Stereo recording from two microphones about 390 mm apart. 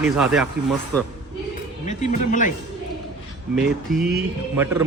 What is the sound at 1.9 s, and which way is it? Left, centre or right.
Speech, centre.